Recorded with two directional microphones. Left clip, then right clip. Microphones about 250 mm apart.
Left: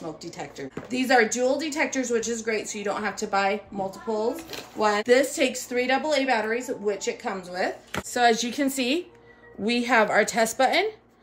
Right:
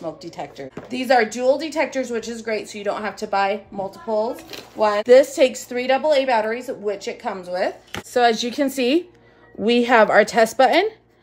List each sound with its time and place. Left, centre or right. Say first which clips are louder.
0.2 s a woman's voice: right 4 dB; centre